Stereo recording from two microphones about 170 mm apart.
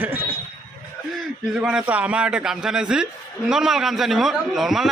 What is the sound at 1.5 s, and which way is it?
A man's voice, 5° right (ahead or behind).